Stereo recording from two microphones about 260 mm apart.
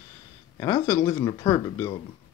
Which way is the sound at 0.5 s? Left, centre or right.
Centre.